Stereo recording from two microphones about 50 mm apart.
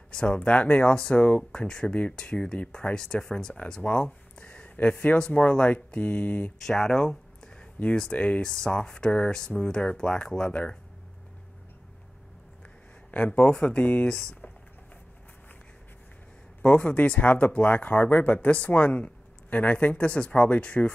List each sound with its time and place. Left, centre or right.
0.1 s speech: centre
3.8 s a sound: left
4.8 s speech: left
6.6 s speech: centre
8.2 s speech: left
13.1 s speech: left
14.0 s speech: centre
16.6 s speech: left